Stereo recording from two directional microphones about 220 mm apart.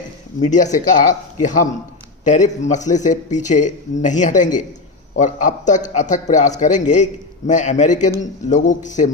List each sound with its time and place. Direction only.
0.3 s a man's voice: 35° left (ahead or behind)